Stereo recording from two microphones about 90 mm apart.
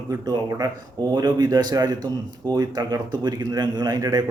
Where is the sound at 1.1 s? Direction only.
55° right (ahead or behind).